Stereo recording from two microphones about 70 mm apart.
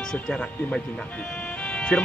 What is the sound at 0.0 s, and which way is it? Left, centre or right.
Speech, centre.